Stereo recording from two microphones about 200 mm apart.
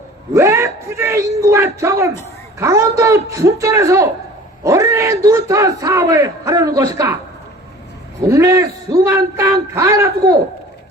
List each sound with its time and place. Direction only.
0.3 s a sound: 15° right (ahead or behind)
2.6 s speech: 15° right (ahead or behind)
8.3 s speech: 15° right (ahead or behind)